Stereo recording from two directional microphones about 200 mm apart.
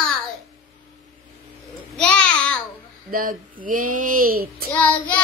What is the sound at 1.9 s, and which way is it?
Speech, 5° left (ahead or behind).